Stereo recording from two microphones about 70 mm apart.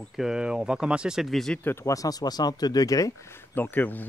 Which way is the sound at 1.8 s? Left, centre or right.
Left.